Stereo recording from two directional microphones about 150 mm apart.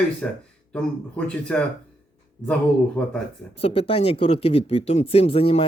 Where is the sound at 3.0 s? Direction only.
10° left (ahead or behind).